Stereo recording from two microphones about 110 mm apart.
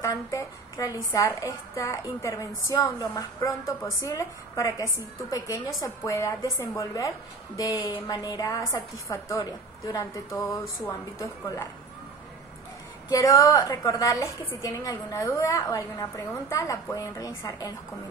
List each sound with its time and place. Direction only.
0.0 s a woman's voice: 30° left (ahead or behind)
13.1 s a woman's voice: 30° left (ahead or behind)